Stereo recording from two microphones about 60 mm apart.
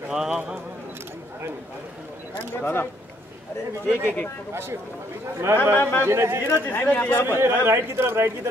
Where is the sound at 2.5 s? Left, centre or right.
Left.